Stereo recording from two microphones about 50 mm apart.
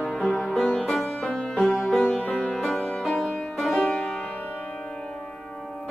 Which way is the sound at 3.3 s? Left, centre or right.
Centre.